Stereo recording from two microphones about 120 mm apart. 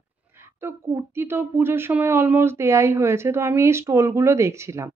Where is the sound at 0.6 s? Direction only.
20° right (ahead or behind).